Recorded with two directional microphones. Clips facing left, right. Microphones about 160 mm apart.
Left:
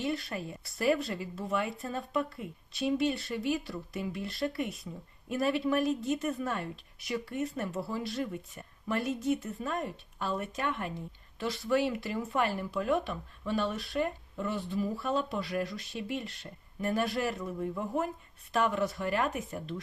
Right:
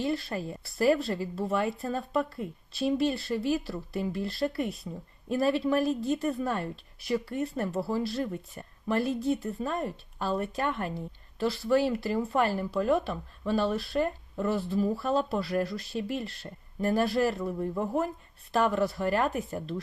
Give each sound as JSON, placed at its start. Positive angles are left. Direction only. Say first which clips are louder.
{"t": 0.0, "sound": "speech", "louder": "right 3 dB", "side_deg": -30}